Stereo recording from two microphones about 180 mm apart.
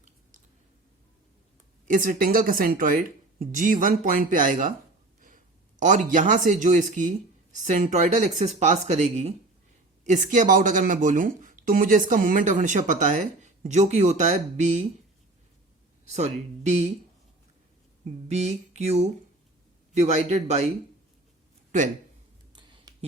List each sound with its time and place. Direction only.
1.9 s speech: 50° right (ahead or behind)
5.8 s speech: 45° right (ahead or behind)
16.0 s speech: 40° right (ahead or behind)
18.3 s speech: 40° right (ahead or behind)
22.5 s a sound: 25° right (ahead or behind)